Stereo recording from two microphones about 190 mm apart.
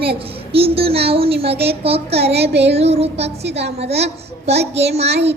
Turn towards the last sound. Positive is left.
turn(degrees=-35)  # may be behind; listen again after turning